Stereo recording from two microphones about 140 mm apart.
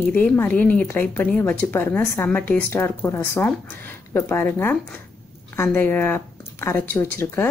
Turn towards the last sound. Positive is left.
turn(degrees=20)  # may be behind; listen again after turning